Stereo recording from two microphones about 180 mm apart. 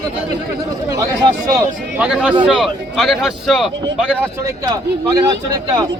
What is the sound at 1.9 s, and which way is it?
A man's voice, 5° right (ahead or behind).